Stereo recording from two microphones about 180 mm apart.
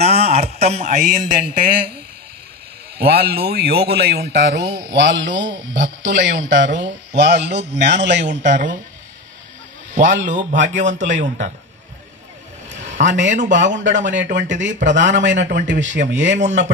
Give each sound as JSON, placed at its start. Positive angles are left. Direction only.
{"t": 0.0, "sound": "speech", "side_deg": -35}
{"t": 3.0, "sound": "speech", "side_deg": -60}
{"t": 8.4, "sound": "speech", "side_deg": -45}
{"t": 10.1, "sound": "a man's voice", "side_deg": -90}
{"t": 11.1, "sound": "speech", "side_deg": -45}
{"t": 12.7, "sound": "a sound", "side_deg": -40}
{"t": 13.0, "sound": "a man's voice", "side_deg": -90}
{"t": 14.5, "sound": "speech", "side_deg": -45}
{"t": 15.0, "sound": "a man's voice", "side_deg": -90}